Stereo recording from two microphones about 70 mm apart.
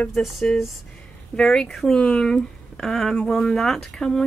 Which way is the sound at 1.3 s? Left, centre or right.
Centre.